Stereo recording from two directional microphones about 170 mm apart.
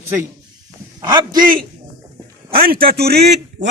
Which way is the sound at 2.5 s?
60° right (ahead or behind).